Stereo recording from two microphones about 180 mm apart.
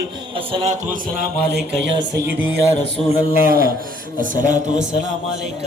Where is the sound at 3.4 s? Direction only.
55° right (ahead or behind).